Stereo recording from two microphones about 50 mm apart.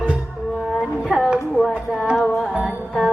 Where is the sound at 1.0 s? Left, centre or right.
Centre.